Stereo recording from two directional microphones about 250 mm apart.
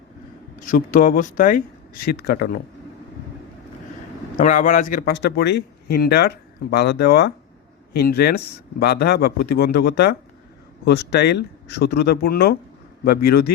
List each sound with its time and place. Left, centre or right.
0.6 s a man's voice: left
4.4 s a man's voice: left